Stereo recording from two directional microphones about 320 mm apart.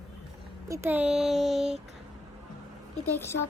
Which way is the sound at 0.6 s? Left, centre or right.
Centre.